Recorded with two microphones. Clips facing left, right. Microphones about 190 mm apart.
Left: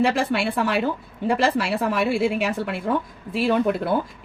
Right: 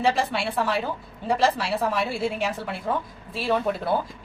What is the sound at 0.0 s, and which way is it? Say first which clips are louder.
A woman's voice: left 3 dB; 60° left (ahead or behind).